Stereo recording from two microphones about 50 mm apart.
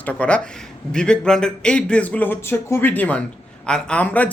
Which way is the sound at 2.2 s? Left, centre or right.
Left.